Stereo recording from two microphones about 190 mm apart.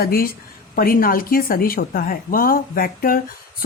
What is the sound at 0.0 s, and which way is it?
Speech, 50° left (ahead or behind).